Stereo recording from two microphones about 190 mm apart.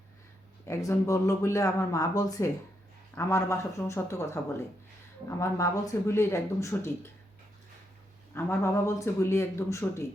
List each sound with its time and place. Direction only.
0.6 s speech: 15° left (ahead or behind)
5.4 s speech: 15° left (ahead or behind)
8.4 s speech: 15° left (ahead or behind)